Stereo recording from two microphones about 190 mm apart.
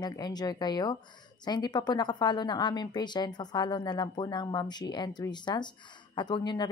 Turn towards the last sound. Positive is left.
turn(degrees=25)  # may be behind; listen again after turning